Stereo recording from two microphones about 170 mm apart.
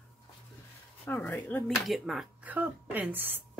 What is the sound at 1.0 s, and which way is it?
Speech, 10° left (ahead or behind).